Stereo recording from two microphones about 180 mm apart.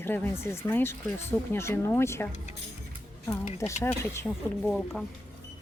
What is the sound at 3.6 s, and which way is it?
Speech, 15° left (ahead or behind).